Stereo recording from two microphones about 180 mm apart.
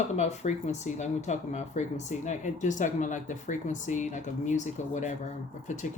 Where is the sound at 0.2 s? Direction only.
40° left (ahead or behind).